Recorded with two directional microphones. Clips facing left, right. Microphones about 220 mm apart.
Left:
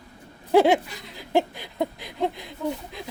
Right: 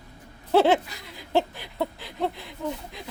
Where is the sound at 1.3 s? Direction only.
15° left (ahead or behind).